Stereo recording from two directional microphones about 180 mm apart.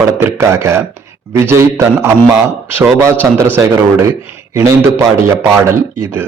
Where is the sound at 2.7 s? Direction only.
15° right (ahead or behind).